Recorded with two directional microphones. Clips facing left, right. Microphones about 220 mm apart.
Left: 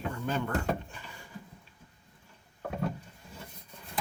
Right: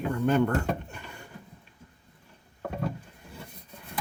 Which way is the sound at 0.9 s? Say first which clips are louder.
Right 4 dB; 60° right (ahead or behind).